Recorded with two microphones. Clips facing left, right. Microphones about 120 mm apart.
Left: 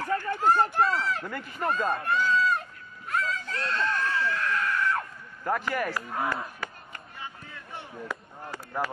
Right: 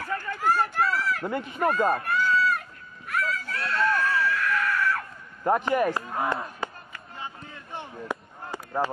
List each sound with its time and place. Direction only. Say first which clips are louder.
0.2 s run: even; 20° left (ahead or behind)
1.2 s speech: right 6 dB; 20° right (ahead or behind)
2.0 s goat: right 1 dB; 20° left (ahead or behind)
3.1 s a sound: right 1 dB; 20° left (ahead or behind)
5.4 s speech: right 6 dB; 20° right (ahead or behind)
6.6 s chop: right 5 dB; 20° right (ahead or behind)
7.2 s a sound: right 4 dB; 20° right (ahead or behind)